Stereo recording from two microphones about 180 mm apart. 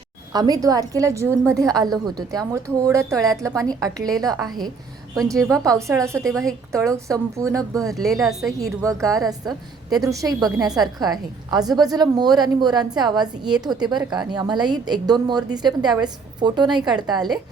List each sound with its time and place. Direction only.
0.3 s a woman's voice: 20° right (ahead or behind)
8.2 s a woman's voice: centre (ahead or behind)
8.5 s a woman's voice: 20° right (ahead or behind)